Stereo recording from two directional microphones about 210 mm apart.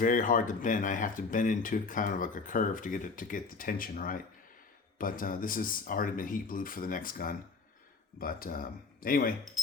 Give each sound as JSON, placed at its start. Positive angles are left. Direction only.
{"t": 0.0, "sound": "speech", "side_deg": 40}